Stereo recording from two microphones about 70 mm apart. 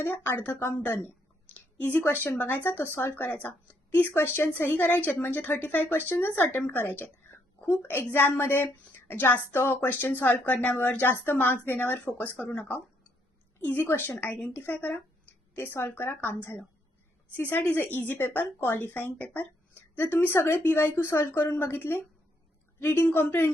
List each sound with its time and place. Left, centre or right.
0.0 s a woman's voice: left
1.5 s a sound: left
2.2 s a woman's voice: left